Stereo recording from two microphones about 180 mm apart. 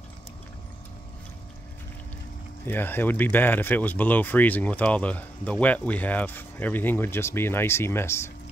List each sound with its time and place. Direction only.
2.6 s speech: 10° left (ahead or behind)